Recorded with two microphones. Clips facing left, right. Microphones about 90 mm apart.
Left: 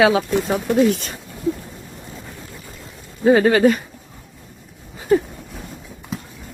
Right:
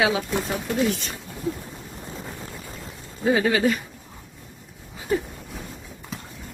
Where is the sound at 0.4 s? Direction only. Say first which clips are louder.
Left 7 dB; 45° left (ahead or behind).